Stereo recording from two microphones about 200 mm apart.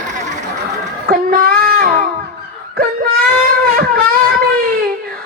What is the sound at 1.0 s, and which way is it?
Child singing, 45° right (ahead or behind).